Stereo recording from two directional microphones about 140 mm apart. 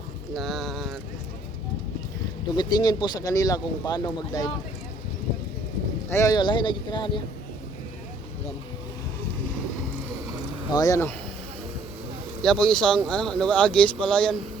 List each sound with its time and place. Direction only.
0.3 s a sound: centre (ahead or behind)
2.6 s speech: 30° left (ahead or behind)
6.1 s speech: 20° left (ahead or behind)
6.3 s speech: 35° left (ahead or behind)
10.7 s speech: 25° left (ahead or behind)
12.4 s speech: 5° left (ahead or behind)